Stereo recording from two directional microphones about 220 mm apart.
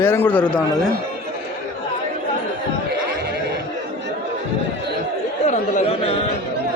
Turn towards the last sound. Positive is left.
turn(degrees=30)  # may be behind; listen again after turning